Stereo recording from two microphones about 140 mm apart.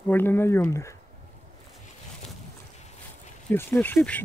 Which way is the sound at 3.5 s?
15° left (ahead or behind).